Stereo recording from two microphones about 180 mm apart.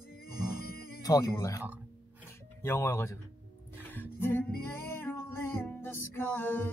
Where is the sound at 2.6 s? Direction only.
15° left (ahead or behind).